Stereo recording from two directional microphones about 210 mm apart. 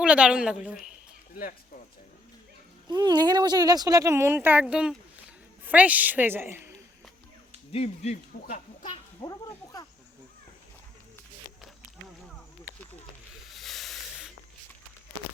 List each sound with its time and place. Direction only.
0.0 s a woman's voice: 5° right (ahead or behind)
2.8 s speech: 20° right (ahead or behind)
7.7 s speech: 30° left (ahead or behind)
9.2 s speech: 20° left (ahead or behind)
13.5 s a sound: centre (ahead or behind)